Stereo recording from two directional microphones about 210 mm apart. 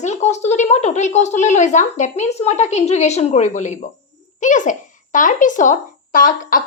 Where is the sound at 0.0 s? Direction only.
35° left (ahead or behind).